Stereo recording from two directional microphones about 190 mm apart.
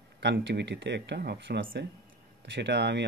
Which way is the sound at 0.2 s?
65° right (ahead or behind).